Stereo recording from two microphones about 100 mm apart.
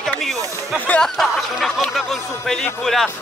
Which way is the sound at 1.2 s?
Centre (ahead or behind).